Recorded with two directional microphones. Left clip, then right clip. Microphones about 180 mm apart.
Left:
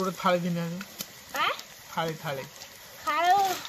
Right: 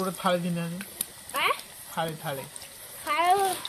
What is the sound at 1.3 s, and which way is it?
Clip-clop, 55° right (ahead or behind).